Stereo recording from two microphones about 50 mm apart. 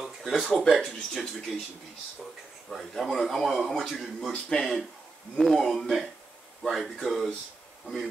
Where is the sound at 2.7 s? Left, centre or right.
Centre.